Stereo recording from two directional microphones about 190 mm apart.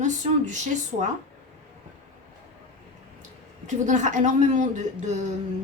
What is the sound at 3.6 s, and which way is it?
A woman's voice, 40° right (ahead or behind).